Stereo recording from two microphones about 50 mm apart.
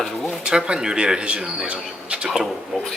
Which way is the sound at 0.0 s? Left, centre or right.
Centre.